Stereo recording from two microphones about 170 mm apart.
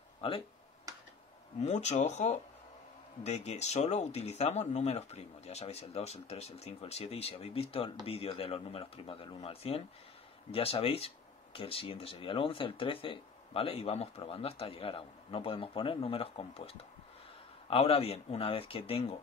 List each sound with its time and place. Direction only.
1.6 s speech: 40° left (ahead or behind)